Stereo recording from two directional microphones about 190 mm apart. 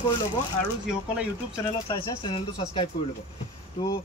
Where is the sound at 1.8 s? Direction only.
25° left (ahead or behind).